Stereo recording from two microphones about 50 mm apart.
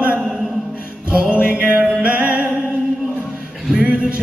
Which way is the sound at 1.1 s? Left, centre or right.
Right.